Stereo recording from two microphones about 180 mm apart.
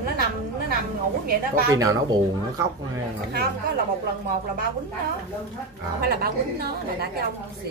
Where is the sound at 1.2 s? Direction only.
55° right (ahead or behind).